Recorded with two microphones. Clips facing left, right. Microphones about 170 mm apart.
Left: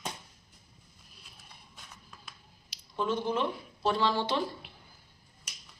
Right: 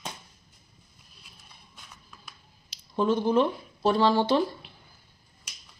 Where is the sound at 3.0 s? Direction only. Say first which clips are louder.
Right 7 dB; 40° right (ahead or behind).